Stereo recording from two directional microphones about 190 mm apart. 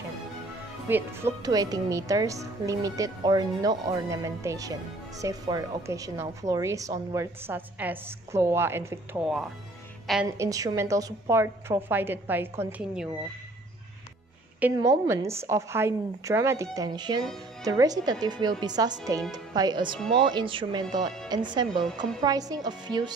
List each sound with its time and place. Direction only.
0.8 s a woman's voice: 10° right (ahead or behind)
10.2 s a woman's voice: 15° right (ahead or behind)
14.6 s a woman's voice: 15° right (ahead or behind)